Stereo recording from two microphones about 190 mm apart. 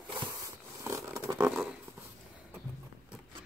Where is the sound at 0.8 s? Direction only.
15° right (ahead or behind).